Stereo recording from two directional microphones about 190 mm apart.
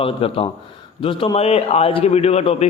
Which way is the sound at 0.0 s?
30° left (ahead or behind).